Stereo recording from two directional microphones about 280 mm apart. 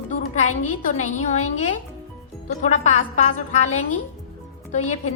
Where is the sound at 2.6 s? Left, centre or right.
Left.